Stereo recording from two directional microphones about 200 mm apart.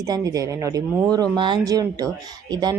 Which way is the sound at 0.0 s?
15° right (ahead or behind).